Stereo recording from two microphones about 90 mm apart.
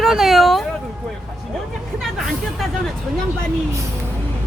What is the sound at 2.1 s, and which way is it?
Speech, centre (ahead or behind).